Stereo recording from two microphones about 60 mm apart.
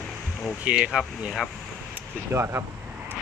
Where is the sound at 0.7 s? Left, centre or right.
Right.